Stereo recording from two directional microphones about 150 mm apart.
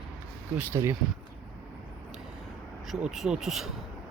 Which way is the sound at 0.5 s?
15° right (ahead or behind).